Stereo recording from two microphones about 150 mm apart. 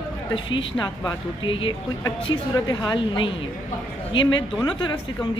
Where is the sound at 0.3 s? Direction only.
30° left (ahead or behind).